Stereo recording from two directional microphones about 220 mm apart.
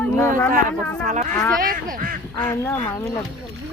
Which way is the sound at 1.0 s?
35° right (ahead or behind).